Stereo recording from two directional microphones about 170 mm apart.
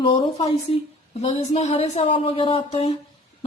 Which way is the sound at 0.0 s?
35° left (ahead or behind).